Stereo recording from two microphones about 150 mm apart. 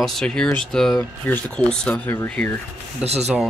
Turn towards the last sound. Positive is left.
turn(degrees=-45)  # may be behind; listen again after turning